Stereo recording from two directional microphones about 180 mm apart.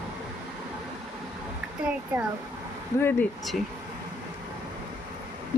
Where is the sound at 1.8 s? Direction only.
5° right (ahead or behind).